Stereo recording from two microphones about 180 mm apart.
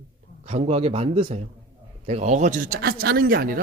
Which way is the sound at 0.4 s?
35° right (ahead or behind).